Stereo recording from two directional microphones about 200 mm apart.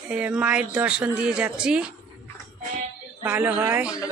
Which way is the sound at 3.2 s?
10° right (ahead or behind).